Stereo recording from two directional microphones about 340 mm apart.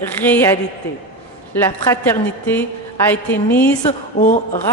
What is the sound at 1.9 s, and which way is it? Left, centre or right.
A woman's voice, centre.